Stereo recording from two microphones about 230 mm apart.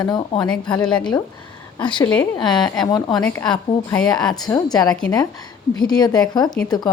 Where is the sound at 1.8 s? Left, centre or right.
Left.